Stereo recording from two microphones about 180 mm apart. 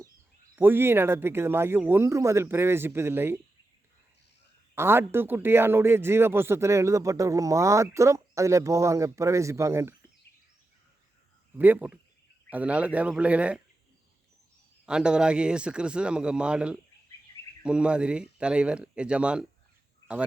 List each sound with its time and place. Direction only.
0.5 s speech: 10° right (ahead or behind)
4.7 s speech: 15° right (ahead or behind)
11.5 s speech: 10° right (ahead or behind)
14.8 s speech: 5° right (ahead or behind)